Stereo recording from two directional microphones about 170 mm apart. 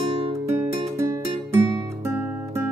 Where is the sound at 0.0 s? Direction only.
35° right (ahead or behind).